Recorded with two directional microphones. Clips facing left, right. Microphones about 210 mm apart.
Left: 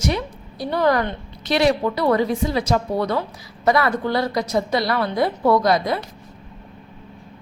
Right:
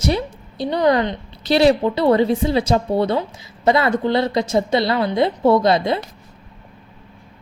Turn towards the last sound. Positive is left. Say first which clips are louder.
# right 2 dB
turn(degrees=-25)  # may be behind; listen again after turning